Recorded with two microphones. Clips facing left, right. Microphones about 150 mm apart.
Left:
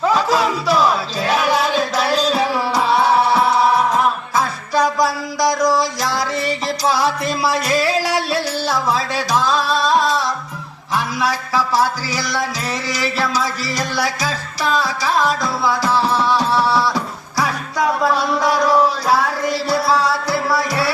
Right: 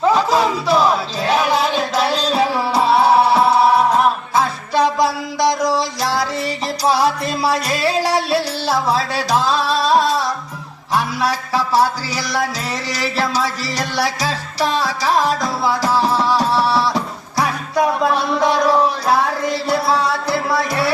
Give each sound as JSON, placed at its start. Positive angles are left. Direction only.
{"t": 0.0, "sound": "music", "side_deg": -25}